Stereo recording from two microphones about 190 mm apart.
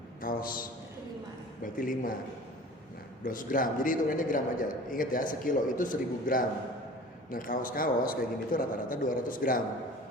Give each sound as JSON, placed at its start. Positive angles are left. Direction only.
{"t": 0.2, "sound": "a sound", "side_deg": 50}
{"t": 1.6, "sound": "a man's voice", "side_deg": 45}
{"t": 3.2, "sound": "a man's voice", "side_deg": 45}